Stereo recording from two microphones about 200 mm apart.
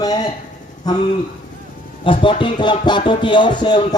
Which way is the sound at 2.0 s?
25° left (ahead or behind).